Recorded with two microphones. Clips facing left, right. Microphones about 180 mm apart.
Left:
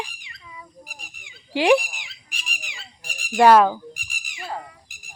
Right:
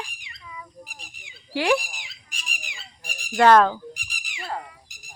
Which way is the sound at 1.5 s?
15° left (ahead or behind).